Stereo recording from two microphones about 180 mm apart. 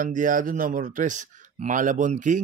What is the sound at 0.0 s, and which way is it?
Speech, 45° right (ahead or behind).